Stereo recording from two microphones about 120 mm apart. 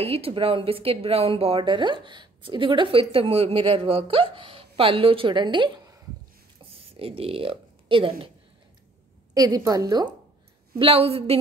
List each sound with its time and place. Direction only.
0.0 s speech: 55° right (ahead or behind)
6.6 s speech: 50° right (ahead or behind)
9.3 s a woman's voice: 30° right (ahead or behind)
10.8 s a woman's voice: 55° right (ahead or behind)